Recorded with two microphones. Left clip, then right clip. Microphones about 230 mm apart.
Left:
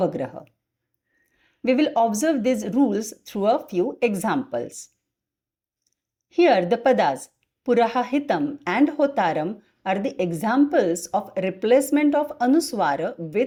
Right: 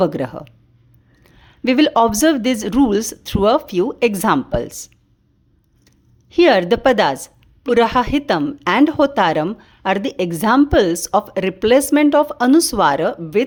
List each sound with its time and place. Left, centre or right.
0.0 s speech: right
6.3 s speech: right